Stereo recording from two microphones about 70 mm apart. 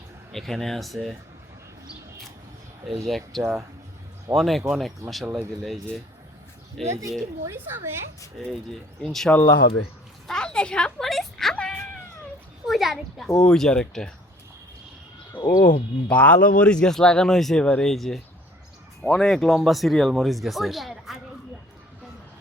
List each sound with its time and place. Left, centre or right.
0.3 s speech: centre
3.1 s speech: centre
6.8 s speech: right
7.4 s a woman's voice: right
8.4 s speech: centre
10.2 s a sound: centre
11.5 s cat: centre
12.6 s speech: centre
13.4 s speech: centre
15.4 s speech: left
16.0 s speech: centre